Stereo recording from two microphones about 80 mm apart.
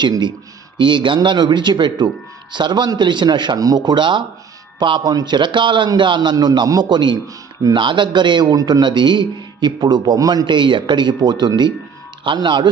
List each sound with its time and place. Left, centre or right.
0.8 s a man's voice: right
3.6 s a man's voice: right
6.0 s a man's voice: right
6.3 s a man's voice: right
8.5 s a man's voice: right
10.2 s a man's voice: right
12.2 s speech: right